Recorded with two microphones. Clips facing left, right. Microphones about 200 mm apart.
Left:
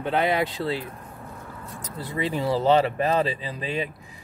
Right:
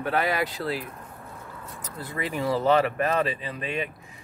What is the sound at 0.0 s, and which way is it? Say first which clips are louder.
Speech: left 2 dB; 25° left (ahead or behind).